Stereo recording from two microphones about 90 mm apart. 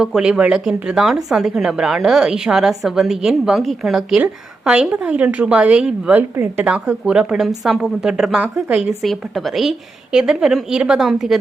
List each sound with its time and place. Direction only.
0.0 s a woman's voice: 10° right (ahead or behind)
6.3 s speech: 25° right (ahead or behind)
6.7 s a woman's voice: 10° right (ahead or behind)